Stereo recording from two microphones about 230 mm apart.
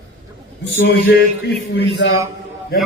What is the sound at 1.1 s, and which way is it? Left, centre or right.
A man's voice, left.